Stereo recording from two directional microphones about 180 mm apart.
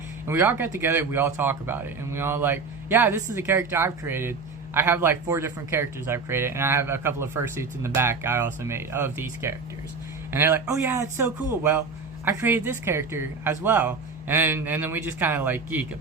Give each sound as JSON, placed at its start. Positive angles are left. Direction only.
{"t": 0.3, "sound": "speech", "side_deg": -10}